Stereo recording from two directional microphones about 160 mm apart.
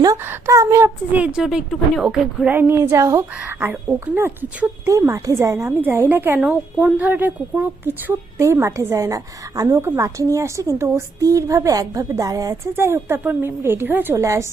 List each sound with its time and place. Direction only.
0.0 s a woman's voice: 20° right (ahead or behind)